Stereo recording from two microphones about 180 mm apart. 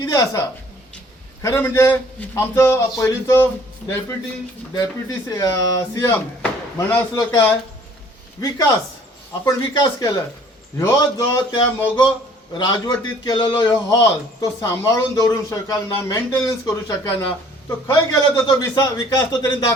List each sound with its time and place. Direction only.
0.0 s a man's voice: 20° left (ahead or behind)
8.4 s a man's voice: 20° left (ahead or behind)